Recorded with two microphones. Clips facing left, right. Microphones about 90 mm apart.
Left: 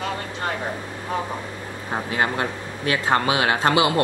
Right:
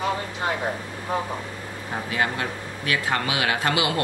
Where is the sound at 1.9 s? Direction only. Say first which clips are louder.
Left 3 dB; 30° left (ahead or behind).